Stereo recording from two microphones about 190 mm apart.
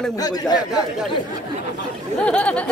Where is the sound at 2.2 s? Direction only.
5° left (ahead or behind).